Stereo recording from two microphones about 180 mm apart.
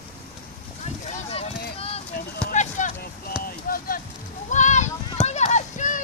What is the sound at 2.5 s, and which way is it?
Vehicle, 45° left (ahead or behind).